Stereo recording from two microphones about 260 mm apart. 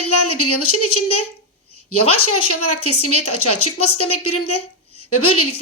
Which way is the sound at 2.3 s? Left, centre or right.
Left.